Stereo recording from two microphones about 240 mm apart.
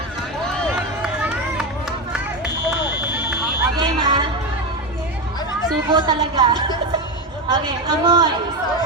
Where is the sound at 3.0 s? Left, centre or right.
Centre.